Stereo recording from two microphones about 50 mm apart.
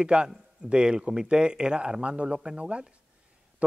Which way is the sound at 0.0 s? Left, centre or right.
Centre.